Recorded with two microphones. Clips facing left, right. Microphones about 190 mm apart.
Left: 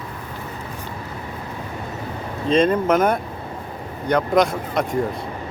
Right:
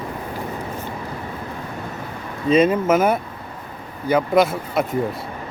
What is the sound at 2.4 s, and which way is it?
Speech, 5° right (ahead or behind).